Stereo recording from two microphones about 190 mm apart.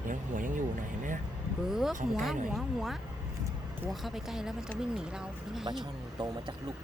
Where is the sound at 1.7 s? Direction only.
Centre (ahead or behind).